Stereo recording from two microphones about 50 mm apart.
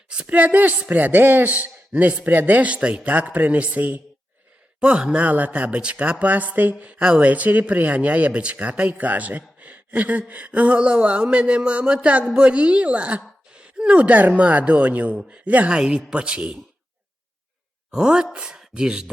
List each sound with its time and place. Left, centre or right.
0.3 s a man's voice: right
1.5 s a man's voice: right
7.0 s speech: right
17.9 s speech: centre